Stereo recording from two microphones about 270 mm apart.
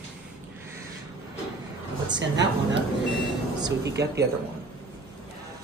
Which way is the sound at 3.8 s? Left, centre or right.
Right.